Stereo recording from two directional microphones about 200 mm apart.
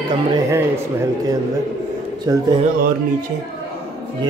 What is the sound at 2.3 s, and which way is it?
Speech, 20° right (ahead or behind).